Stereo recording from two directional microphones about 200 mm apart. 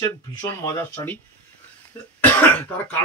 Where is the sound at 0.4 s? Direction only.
15° left (ahead or behind).